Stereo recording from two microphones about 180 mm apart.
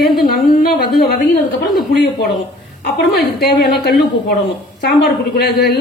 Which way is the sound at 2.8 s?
60° left (ahead or behind).